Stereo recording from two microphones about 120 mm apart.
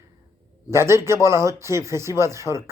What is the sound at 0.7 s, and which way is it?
Speech, 20° right (ahead or behind).